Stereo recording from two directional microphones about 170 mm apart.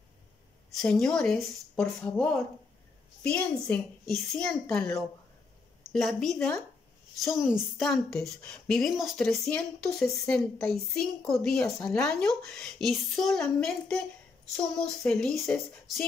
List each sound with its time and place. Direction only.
0.7 s a woman's voice: 5° left (ahead or behind)
5.9 s a woman's voice: centre (ahead or behind)